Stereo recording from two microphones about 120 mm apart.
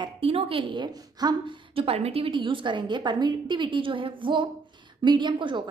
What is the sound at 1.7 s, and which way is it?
A woman's voice, 55° right (ahead or behind).